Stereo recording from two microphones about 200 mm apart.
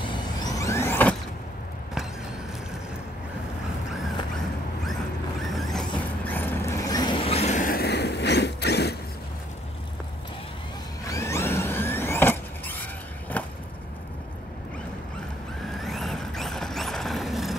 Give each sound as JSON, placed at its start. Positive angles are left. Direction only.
{"t": 0.0, "sound": "vehicle", "side_deg": 20}
{"t": 5.4, "sound": "vehicle", "side_deg": 0}
{"t": 11.1, "sound": "power windows", "side_deg": 15}
{"t": 15.6, "sound": "vehicle", "side_deg": 0}